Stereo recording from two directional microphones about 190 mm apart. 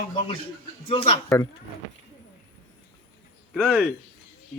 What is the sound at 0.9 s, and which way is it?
Speech, 30° left (ahead or behind).